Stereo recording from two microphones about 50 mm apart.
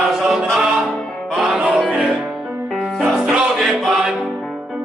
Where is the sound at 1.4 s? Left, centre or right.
Centre.